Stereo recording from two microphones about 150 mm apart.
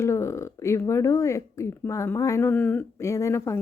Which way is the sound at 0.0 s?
20° left (ahead or behind).